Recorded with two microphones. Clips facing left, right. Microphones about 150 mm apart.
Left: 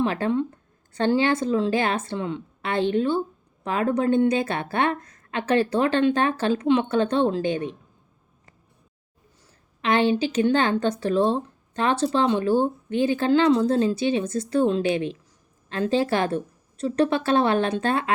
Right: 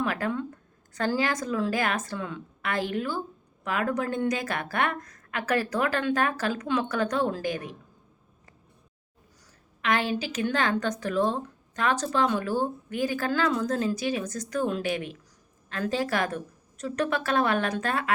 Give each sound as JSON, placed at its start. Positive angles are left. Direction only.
{"t": 0.0, "sound": "speech", "side_deg": 25}
{"t": 9.8, "sound": "speech", "side_deg": 30}